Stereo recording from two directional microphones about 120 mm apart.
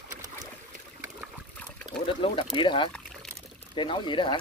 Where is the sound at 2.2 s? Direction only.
50° left (ahead or behind).